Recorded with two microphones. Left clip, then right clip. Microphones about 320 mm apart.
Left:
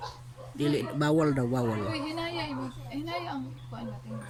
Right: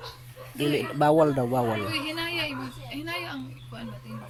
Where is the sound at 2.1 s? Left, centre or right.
Left.